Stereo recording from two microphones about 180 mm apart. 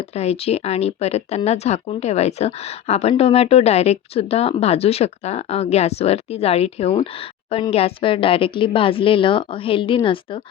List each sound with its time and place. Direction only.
0.1 s a woman's voice: 35° left (ahead or behind)